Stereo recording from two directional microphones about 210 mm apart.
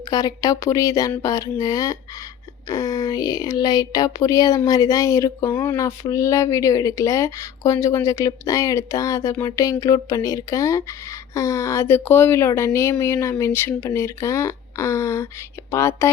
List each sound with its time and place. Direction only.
0.1 s speech: 15° left (ahead or behind)